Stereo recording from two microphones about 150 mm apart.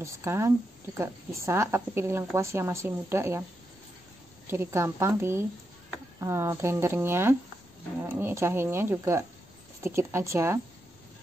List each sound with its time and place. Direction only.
0.0 s a woman's voice: 20° right (ahead or behind)
4.5 s speech: 15° right (ahead or behind)